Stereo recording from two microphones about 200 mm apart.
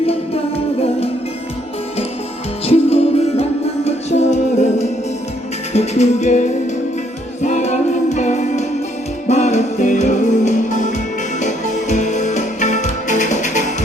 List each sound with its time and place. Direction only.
0.0 s music: 30° left (ahead or behind)
2.6 s music: 30° left (ahead or behind)